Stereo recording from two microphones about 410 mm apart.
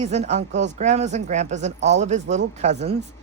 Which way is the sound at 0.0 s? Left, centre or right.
Centre.